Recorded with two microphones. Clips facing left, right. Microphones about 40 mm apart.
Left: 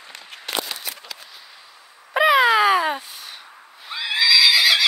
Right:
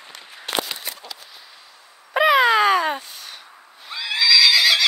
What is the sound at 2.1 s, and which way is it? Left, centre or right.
Cat, centre.